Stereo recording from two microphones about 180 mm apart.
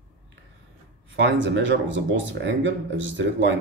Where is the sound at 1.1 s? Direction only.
90° right.